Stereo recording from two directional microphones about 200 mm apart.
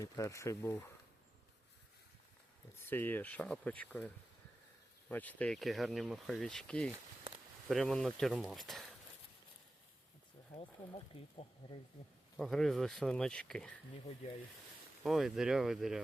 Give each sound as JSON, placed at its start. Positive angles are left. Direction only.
{"t": 0.0, "sound": "speech", "side_deg": 15}
{"t": 2.9, "sound": "speech", "side_deg": 10}
{"t": 10.5, "sound": "speech", "side_deg": 30}
{"t": 12.4, "sound": "speech", "side_deg": 0}
{"t": 15.0, "sound": "speech", "side_deg": 0}